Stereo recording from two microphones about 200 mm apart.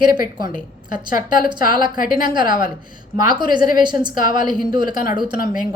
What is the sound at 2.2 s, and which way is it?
Speech, 20° right (ahead or behind).